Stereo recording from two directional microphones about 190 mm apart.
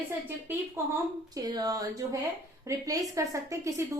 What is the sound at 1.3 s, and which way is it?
A woman's voice, 20° right (ahead or behind).